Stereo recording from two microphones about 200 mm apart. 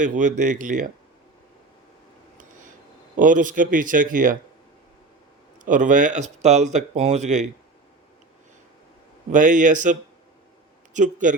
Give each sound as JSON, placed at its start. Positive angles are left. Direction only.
{"t": 0.0, "sound": "speech", "side_deg": -40}
{"t": 3.2, "sound": "speech", "side_deg": -40}
{"t": 5.5, "sound": "speech", "side_deg": -40}
{"t": 9.3, "sound": "speech", "side_deg": -40}